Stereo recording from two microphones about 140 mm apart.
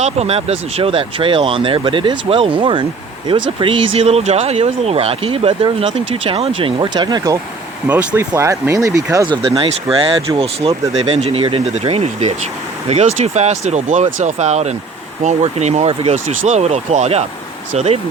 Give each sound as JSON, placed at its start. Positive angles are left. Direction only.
{"t": 0.0, "sound": "speech", "side_deg": -50}
{"t": 7.9, "sound": "speech", "side_deg": -15}
{"t": 9.2, "sound": "speech", "side_deg": -40}